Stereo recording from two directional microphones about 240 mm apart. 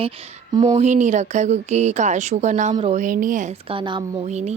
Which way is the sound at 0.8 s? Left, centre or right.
Right.